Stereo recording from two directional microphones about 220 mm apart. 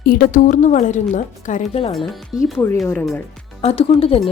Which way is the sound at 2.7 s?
5° left (ahead or behind).